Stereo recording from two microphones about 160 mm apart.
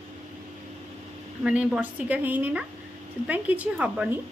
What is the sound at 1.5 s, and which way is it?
A woman's voice, 5° right (ahead or behind).